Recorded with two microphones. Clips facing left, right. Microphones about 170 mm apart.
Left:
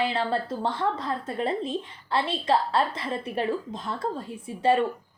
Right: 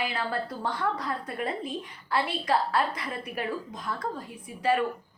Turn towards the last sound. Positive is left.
turn(degrees=25)  # may be behind; listen again after turning